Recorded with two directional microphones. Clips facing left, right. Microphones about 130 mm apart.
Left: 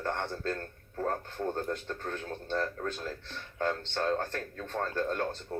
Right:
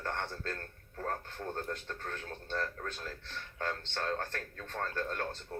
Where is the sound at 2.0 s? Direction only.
25° left (ahead or behind).